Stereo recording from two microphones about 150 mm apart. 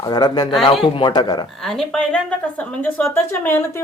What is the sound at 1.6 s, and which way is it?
A woman's voice, centre (ahead or behind).